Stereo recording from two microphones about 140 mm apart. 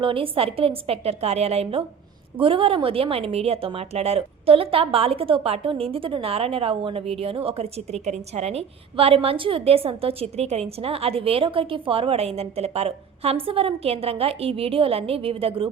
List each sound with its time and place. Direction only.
0.0 s a woman's voice: 40° right (ahead or behind)